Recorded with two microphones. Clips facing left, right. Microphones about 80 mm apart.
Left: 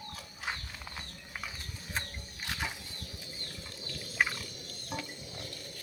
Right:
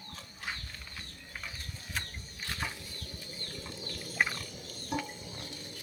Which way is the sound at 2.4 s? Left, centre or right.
Centre.